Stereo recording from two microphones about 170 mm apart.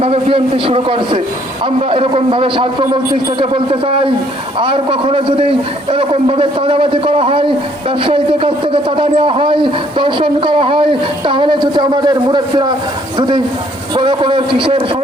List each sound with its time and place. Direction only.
0.0 s a man's voice: 35° right (ahead or behind)